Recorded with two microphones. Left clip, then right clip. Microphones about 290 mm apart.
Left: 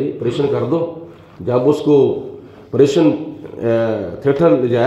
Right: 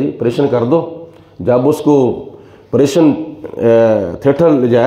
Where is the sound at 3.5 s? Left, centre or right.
Right.